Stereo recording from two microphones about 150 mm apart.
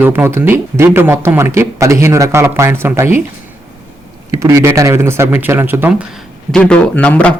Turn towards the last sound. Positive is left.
turn(degrees=10)  # may be behind; listen again after turning